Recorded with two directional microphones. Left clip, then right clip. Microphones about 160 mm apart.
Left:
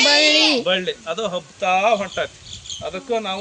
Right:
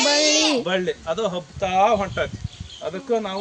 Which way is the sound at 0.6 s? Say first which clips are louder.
Left 2 dB; 85° right.